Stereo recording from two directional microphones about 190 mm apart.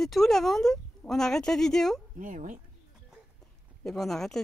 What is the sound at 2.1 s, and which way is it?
Speech, 45° right (ahead or behind).